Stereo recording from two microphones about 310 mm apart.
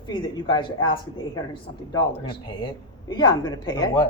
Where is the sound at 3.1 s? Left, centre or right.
Centre.